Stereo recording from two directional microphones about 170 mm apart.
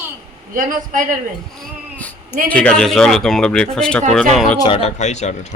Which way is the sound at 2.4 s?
5° left (ahead or behind).